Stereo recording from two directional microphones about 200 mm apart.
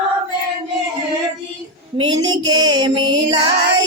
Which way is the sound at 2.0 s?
20° right (ahead or behind).